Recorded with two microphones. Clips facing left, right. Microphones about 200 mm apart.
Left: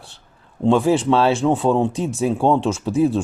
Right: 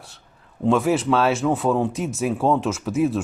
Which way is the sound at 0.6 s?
30° left (ahead or behind).